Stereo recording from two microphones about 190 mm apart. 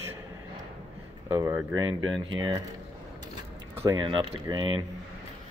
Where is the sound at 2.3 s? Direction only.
20° right (ahead or behind).